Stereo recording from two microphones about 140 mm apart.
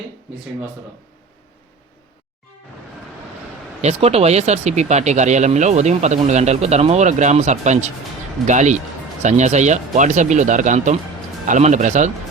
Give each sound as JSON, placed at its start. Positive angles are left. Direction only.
{"t": 3.8, "sound": "speech", "side_deg": -50}